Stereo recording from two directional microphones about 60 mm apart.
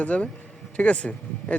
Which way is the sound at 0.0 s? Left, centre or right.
Left.